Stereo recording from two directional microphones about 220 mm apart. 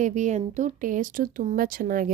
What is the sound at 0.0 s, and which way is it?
Speech, 35° right (ahead or behind).